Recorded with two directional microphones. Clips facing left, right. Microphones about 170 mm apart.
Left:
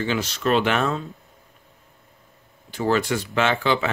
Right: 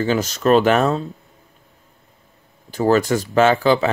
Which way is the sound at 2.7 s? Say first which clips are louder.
Right 5 dB; 40° right (ahead or behind).